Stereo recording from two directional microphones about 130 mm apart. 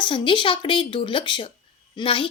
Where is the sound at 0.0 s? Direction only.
40° left (ahead or behind).